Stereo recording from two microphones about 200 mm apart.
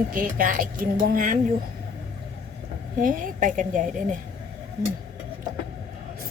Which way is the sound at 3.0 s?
45° right (ahead or behind).